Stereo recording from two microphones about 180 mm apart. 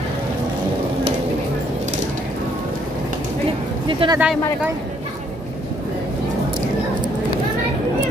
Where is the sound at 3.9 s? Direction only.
25° right (ahead or behind).